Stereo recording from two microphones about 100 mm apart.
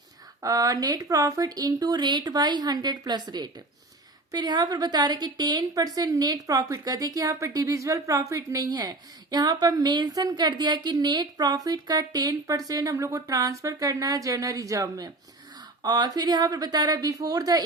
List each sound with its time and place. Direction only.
0.4 s a woman's voice: 35° right (ahead or behind)